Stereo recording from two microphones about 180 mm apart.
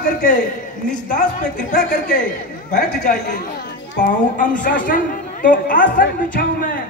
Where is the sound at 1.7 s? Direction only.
45° left (ahead or behind).